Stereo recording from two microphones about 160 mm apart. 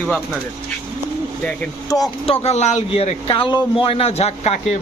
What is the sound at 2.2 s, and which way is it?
A man's voice, 40° left (ahead or behind).